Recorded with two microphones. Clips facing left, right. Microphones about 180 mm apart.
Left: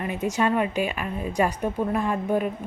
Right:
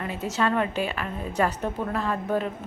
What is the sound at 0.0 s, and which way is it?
Speech, 15° left (ahead or behind).